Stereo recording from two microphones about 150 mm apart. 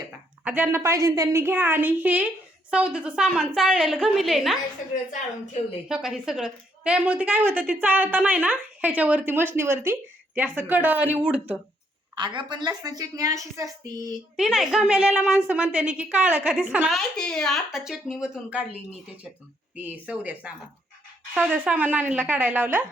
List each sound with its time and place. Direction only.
0.4 s a woman's voice: 10° right (ahead or behind)
5.9 s a woman's voice: 5° right (ahead or behind)
12.1 s a woman's voice: 30° right (ahead or behind)
14.3 s a woman's voice: 5° right (ahead or behind)
19.7 s a woman's voice: 10° right (ahead or behind)